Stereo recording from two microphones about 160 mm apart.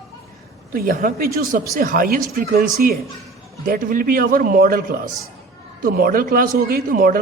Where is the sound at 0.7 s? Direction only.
65° right (ahead or behind).